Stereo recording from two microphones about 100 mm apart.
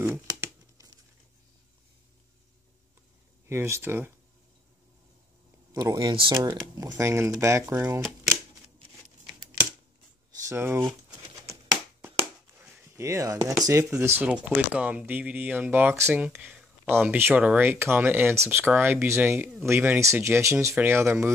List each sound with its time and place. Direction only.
0.0 s tearing: 25° right (ahead or behind)
3.4 s speech: 25° right (ahead or behind)
5.7 s speech: 35° right (ahead or behind)
10.5 s speech: 25° right (ahead or behind)
12.0 s a sound: 20° right (ahead or behind)
14.2 s speech: 10° right (ahead or behind)
17.3 s speech: 10° right (ahead or behind)
17.6 s speech: 25° right (ahead or behind)